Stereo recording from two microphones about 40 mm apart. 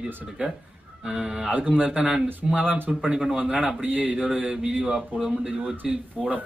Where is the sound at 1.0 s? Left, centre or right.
Centre.